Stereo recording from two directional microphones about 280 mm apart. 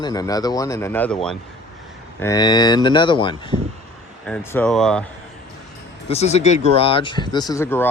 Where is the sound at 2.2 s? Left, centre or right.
Centre.